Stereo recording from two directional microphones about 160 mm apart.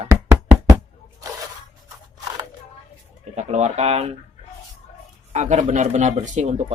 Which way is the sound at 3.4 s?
45° right (ahead or behind).